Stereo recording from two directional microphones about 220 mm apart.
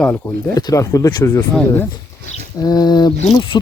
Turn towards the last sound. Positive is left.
turn(degrees=20)  # may be behind; listen again after turning